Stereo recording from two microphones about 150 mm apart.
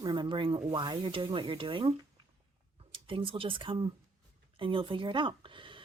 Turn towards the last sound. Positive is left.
turn(degrees=-35)  # may be behind; listen again after turning